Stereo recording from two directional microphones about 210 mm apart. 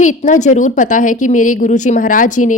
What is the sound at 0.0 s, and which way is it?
A woman's voice, 35° left (ahead or behind).